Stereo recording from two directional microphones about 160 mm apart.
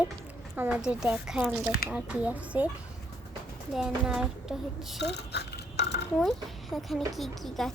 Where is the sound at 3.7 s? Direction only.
5° right (ahead or behind).